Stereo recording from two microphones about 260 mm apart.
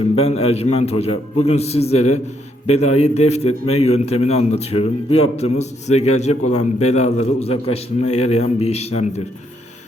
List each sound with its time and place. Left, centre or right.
0.2 s a man's voice: left